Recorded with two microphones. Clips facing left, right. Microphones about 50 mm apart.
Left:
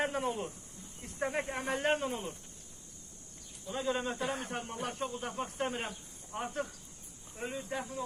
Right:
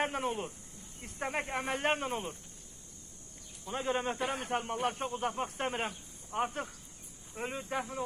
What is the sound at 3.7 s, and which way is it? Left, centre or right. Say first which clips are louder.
Speech: right 1 dB; right.